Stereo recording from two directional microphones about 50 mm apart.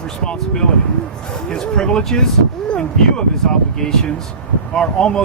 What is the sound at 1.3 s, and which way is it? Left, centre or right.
Speech, centre.